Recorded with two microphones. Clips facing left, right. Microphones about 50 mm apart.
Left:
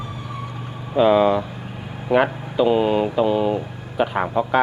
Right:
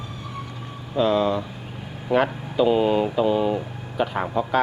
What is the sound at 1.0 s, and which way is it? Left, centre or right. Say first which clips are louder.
Speech: left 5 dB; centre.